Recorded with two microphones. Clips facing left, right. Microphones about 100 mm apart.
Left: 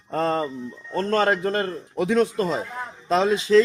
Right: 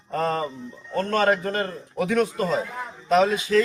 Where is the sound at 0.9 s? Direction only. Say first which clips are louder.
Even; 25° left (ahead or behind).